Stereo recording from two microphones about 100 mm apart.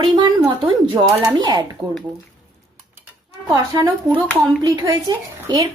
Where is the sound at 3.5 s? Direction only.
35° right (ahead or behind).